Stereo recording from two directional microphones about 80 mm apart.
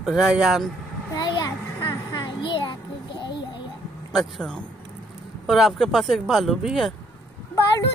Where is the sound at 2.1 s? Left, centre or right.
Left.